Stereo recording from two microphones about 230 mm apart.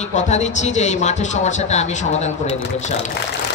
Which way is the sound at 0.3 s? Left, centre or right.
Left.